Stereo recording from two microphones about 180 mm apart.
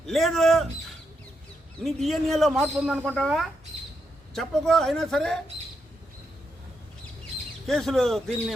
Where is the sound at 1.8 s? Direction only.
Centre (ahead or behind).